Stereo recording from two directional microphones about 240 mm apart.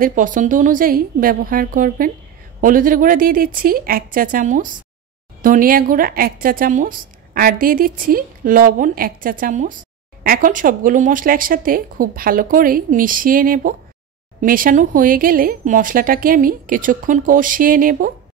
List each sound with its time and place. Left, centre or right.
0.0 s a woman's voice: right